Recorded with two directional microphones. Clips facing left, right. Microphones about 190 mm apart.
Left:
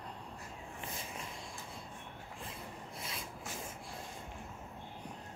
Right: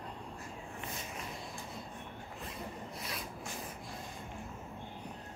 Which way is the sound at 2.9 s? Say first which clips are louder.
Even; 25° left (ahead or behind).